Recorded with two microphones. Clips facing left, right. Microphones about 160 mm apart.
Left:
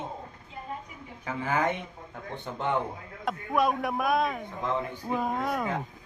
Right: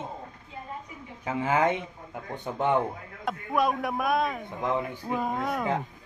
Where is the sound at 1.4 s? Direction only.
20° right (ahead or behind).